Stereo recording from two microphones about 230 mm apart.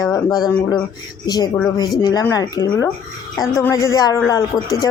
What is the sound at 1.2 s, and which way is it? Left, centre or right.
Speech, centre.